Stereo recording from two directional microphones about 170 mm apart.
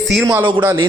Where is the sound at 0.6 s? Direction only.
15° right (ahead or behind).